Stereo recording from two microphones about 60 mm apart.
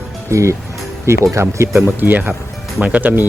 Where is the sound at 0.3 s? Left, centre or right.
Right.